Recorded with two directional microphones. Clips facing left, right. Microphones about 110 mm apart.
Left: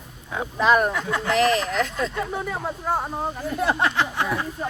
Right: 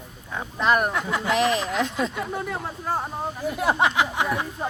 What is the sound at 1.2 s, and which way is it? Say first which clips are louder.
Speech: left 2 dB; 15° right (ahead or behind).